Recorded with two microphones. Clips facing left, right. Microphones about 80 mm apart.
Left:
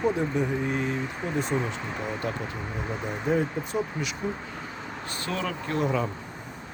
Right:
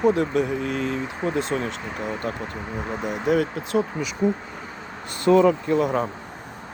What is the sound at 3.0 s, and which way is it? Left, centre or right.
Speech, right.